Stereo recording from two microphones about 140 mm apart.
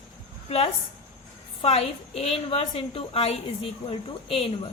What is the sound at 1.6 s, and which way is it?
A woman's voice, 50° left (ahead or behind).